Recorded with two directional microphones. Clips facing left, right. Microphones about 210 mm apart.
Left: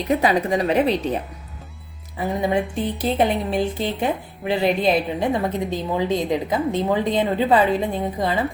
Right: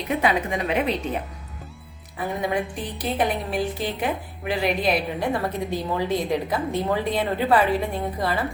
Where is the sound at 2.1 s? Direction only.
25° left (ahead or behind).